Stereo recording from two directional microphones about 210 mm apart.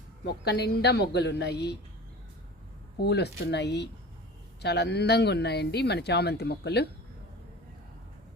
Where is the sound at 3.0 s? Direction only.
50° left (ahead or behind).